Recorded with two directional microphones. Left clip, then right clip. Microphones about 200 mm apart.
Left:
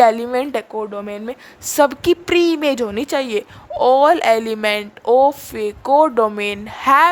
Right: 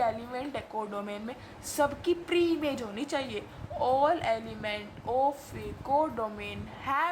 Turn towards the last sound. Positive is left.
turn(degrees=55)  # may be behind; listen again after turning